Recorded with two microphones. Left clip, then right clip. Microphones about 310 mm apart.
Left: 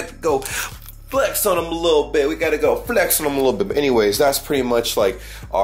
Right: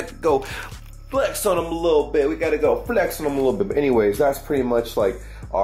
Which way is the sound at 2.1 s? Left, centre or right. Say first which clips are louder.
Left 2 dB; centre.